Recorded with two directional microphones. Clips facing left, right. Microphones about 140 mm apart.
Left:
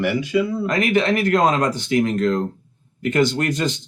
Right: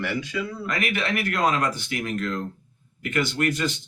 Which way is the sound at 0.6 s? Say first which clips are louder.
Left 9 dB; 35° left (ahead or behind).